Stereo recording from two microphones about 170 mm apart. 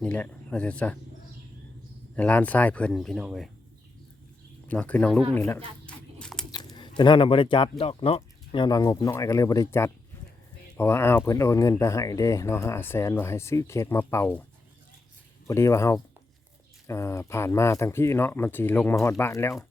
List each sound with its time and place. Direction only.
0.0 s speech: 5° left (ahead or behind)
2.1 s speech: 10° left (ahead or behind)
4.7 s speech: 10° left (ahead or behind)
5.8 s a sound: 5° left (ahead or behind)
6.5 s speech: 25° left (ahead or behind)
8.6 s speech: 20° left (ahead or behind)
15.4 s speech: 15° left (ahead or behind)